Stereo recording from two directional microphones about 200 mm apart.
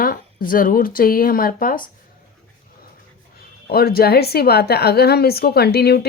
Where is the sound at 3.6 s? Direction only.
50° left (ahead or behind).